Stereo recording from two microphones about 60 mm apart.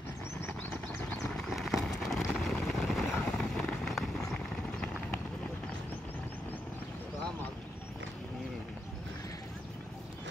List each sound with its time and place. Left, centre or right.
0.5 s a sound: left
1.3 s horse: centre
2.2 s vehicle: centre